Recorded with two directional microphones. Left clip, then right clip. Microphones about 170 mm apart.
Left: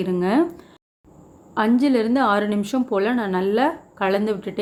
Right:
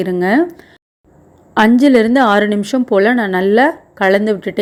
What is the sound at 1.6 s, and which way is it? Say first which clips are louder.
A woman's voice: right 9 dB; 40° right (ahead or behind).